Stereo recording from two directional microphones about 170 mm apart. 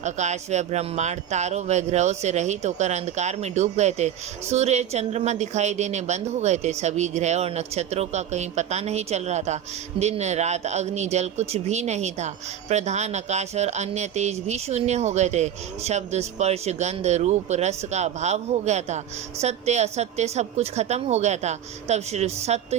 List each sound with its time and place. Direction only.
0.0 s speech: 45° right (ahead or behind)